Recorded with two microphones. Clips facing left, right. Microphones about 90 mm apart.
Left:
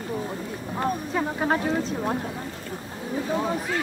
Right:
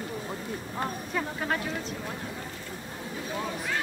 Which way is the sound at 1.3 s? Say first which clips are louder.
Left 7 dB; 30° left (ahead or behind).